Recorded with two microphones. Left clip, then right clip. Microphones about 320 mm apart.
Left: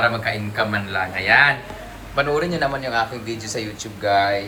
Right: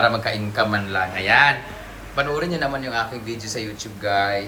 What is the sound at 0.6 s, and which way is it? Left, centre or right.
A man's voice, centre.